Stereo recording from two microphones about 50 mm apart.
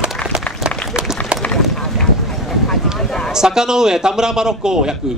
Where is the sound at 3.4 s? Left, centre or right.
Centre.